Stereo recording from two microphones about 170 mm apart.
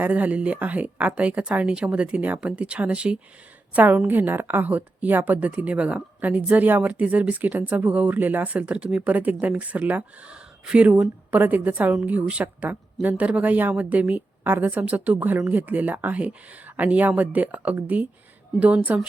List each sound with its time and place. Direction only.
0.0 s a woman's voice: 10° right (ahead or behind)